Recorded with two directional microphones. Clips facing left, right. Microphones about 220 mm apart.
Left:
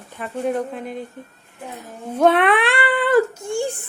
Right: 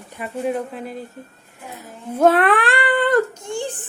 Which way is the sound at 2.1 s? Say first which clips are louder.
Right 1 dB; centre (ahead or behind).